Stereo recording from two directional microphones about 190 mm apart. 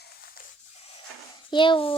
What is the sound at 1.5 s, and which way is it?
Speech, 25° left (ahead or behind).